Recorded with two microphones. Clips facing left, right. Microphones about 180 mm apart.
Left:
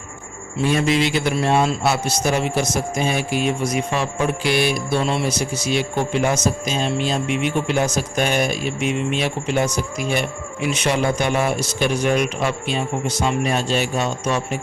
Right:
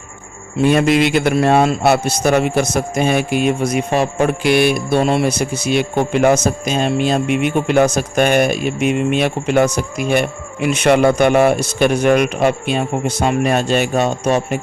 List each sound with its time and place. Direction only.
0.6 s speech: 60° right (ahead or behind)